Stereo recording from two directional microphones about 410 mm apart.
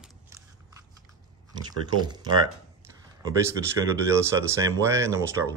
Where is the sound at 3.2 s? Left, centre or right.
Centre.